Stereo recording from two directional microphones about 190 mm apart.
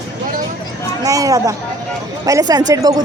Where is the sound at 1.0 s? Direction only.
20° right (ahead or behind).